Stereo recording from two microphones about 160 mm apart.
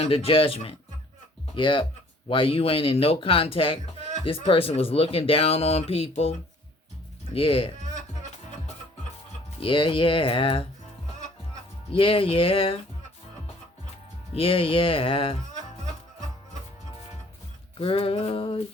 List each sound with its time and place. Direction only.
0.0 s speech: 35° left (ahead or behind)
7.3 s speech: 35° left (ahead or behind)
9.6 s speech: 35° left (ahead or behind)
11.9 s speech: 35° left (ahead or behind)
14.3 s speech: 35° left (ahead or behind)
17.7 s speech: 35° left (ahead or behind)